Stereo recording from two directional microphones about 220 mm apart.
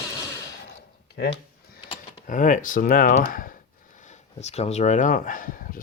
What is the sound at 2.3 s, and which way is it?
Speech, 35° left (ahead or behind).